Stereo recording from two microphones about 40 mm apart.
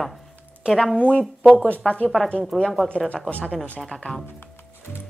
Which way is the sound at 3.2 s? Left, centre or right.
Left.